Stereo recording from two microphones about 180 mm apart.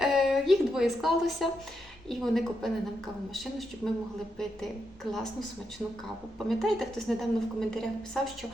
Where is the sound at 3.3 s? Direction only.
Centre (ahead or behind).